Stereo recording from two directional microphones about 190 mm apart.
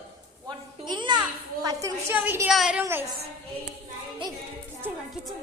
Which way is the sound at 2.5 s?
Centre (ahead or behind).